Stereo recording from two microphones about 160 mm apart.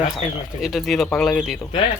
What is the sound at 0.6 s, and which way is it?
Speech, centre (ahead or behind).